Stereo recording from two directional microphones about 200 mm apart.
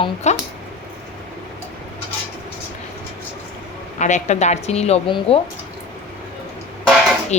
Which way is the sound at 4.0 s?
35° left (ahead or behind).